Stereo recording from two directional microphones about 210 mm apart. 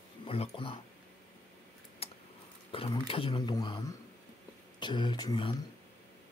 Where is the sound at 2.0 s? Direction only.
25° left (ahead or behind).